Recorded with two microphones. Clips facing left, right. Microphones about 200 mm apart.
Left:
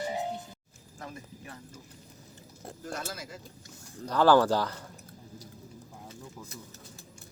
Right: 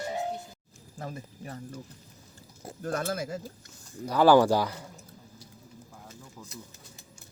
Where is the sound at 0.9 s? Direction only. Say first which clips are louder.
Right 4 dB; 35° right (ahead or behind).